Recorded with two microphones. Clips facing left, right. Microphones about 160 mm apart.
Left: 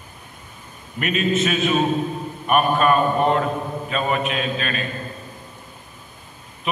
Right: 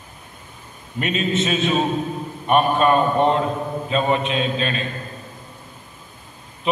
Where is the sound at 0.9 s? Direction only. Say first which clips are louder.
Left 1 dB; 25° right (ahead or behind).